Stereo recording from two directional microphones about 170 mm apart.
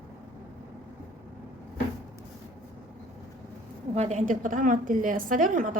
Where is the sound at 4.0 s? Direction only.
45° right (ahead or behind).